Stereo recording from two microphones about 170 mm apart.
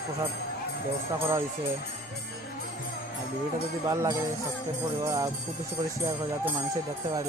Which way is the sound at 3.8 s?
20° right (ahead or behind).